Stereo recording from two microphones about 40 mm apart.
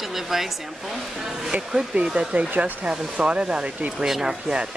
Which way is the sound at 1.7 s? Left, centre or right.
Centre.